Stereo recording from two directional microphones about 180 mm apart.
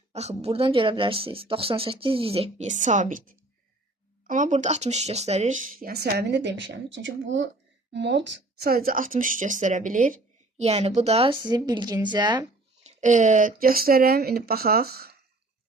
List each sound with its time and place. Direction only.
0.1 s speech: 35° right (ahead or behind); by 7.5 s 90° right
7.9 s speech: 80° right; by 12.5 s 25° right (ahead or behind)
12.8 s speech: 40° right (ahead or behind); by 15.1 s 60° right (ahead or behind)